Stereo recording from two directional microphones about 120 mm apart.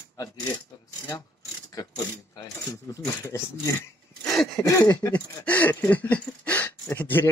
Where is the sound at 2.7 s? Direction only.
30° left (ahead or behind).